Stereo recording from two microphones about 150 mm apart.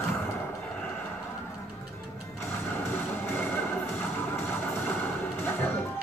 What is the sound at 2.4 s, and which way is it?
Music, 15° left (ahead or behind).